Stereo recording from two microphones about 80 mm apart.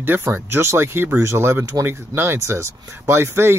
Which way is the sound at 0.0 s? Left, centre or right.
Right.